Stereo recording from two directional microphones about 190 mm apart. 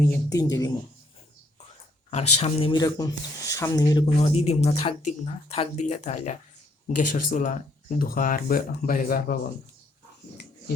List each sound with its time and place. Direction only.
0.0 s speech: 15° left (ahead or behind)
2.0 s speech: 35° left (ahead or behind); by 9.4 s 50° left (ahead or behind)